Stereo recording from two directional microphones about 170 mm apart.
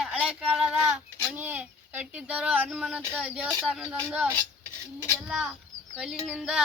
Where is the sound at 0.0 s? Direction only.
5° right (ahead or behind).